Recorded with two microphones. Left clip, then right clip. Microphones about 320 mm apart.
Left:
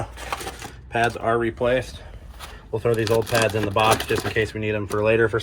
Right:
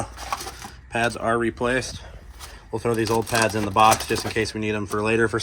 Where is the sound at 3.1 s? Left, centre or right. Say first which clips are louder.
Left 1 dB; centre.